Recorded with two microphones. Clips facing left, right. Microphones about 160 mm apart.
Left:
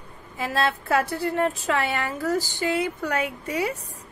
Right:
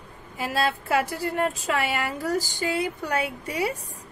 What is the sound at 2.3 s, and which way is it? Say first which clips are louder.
A woman's voice: left 2 dB; 40° right (ahead or behind).